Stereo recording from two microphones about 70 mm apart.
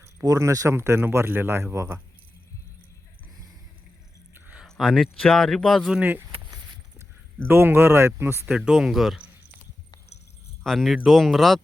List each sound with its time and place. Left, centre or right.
0.2 s speech: right
4.6 s speech: centre
6.0 s speech: right
7.4 s speech: right
8.4 s speech: centre
9.1 s a sound: centre
10.6 s speech: centre